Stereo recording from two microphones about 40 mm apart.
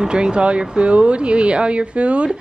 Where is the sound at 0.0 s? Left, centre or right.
Right.